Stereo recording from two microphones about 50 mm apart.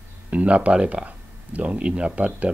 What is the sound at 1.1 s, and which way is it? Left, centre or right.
Speech, right.